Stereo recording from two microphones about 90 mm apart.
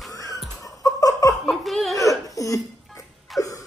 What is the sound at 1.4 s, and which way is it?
Speech, centre (ahead or behind).